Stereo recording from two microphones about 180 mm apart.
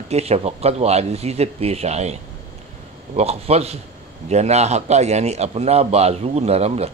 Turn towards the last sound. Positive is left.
turn(degrees=-35)  # may be behind; listen again after turning